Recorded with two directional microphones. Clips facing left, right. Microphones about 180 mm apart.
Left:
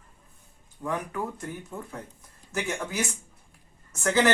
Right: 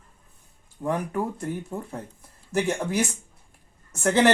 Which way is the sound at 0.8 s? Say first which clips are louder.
Right 5 dB; 30° right (ahead or behind).